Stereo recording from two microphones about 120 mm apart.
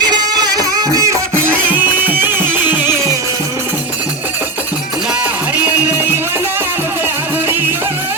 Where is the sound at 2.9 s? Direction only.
35° left (ahead or behind).